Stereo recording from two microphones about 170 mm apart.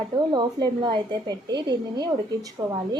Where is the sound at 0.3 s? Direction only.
25° right (ahead or behind).